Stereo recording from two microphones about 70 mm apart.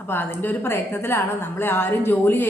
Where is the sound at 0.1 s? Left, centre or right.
Left.